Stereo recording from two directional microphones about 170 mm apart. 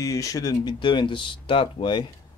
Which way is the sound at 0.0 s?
20° left (ahead or behind).